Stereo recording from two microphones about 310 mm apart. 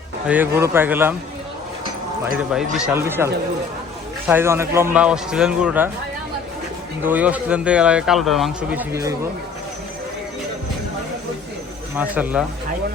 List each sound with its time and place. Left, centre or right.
0.3 s speech: centre
2.5 s speech: centre
4.3 s speech: centre
7.0 s speech: centre
11.9 s speech: centre